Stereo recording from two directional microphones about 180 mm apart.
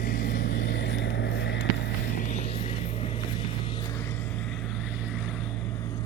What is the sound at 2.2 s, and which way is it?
Vehicle, 40° left (ahead or behind).